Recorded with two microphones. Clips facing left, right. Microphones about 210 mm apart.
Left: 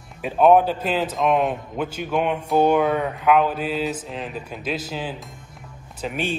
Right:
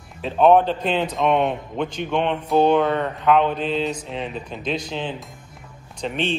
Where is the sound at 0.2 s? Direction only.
5° left (ahead or behind).